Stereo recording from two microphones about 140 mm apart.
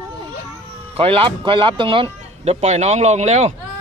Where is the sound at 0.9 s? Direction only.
40° right (ahead or behind).